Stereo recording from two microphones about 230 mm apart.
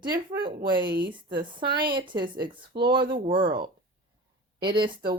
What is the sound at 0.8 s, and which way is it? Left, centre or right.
Speech, right.